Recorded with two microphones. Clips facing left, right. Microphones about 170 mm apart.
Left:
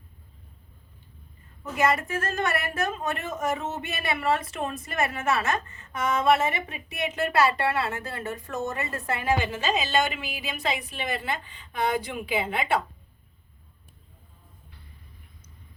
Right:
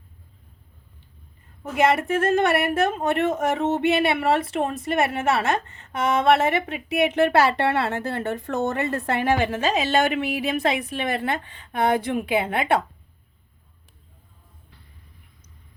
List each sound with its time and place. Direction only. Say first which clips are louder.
1.6 s a woman's voice: right 5 dB; 65° right (ahead or behind)
4.6 s a woman's voice: right 5 dB; 30° right (ahead or behind)
4.9 s a woman's voice: right 4 dB; 70° right (ahead or behind)